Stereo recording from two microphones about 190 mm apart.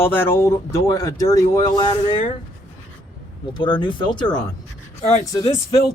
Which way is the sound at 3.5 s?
25° left (ahead or behind).